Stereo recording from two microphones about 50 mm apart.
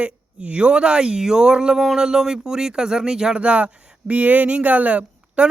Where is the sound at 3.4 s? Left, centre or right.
Right.